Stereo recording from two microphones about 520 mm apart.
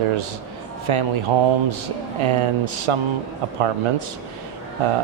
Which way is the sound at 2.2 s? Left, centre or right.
Right.